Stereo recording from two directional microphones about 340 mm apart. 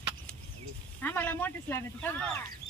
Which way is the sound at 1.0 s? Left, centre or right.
Centre.